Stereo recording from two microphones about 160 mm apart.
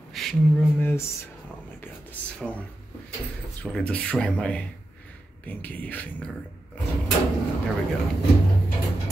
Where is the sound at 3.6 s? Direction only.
5° left (ahead or behind).